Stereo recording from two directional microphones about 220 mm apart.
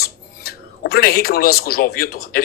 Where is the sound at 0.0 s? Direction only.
45° left (ahead or behind).